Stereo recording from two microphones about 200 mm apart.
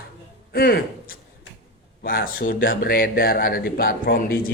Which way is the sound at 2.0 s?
45° left (ahead or behind).